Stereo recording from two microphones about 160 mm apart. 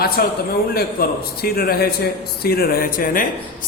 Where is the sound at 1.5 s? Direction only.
70° left (ahead or behind).